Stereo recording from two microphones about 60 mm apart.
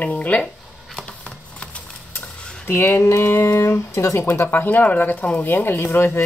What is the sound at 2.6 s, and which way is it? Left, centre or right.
Speech, left.